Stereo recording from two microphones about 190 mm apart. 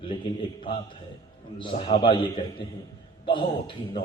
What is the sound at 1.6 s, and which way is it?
Speech, 25° left (ahead or behind).